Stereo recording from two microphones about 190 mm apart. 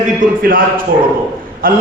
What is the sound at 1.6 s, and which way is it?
Speech, 50° right (ahead or behind).